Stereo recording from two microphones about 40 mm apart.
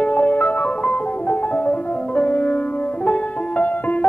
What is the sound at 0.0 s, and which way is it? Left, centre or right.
Music, left.